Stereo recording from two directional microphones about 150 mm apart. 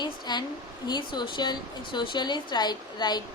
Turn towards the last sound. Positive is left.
turn(degrees=30)  # may be behind; listen again after turning